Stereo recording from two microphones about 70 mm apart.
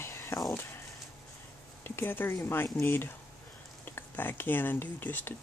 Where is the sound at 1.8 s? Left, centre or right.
Left.